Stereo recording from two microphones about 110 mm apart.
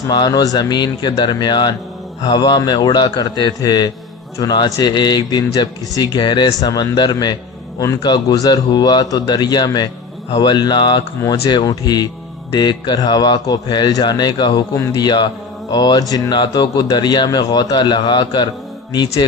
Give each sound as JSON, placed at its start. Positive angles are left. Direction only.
{"t": 0.1, "sound": "speech", "side_deg": 40}
{"t": 14.8, "sound": "speech", "side_deg": 30}